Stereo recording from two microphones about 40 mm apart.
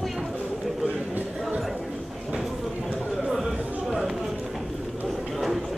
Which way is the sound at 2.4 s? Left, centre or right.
Centre.